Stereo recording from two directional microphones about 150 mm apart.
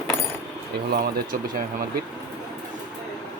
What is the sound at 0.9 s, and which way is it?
Speech, 85° right.